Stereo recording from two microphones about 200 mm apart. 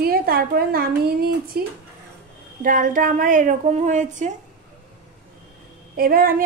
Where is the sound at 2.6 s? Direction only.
40° right (ahead or behind).